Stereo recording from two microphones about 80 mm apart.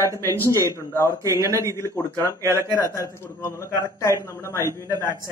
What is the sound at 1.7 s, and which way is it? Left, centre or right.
A man's voice, left.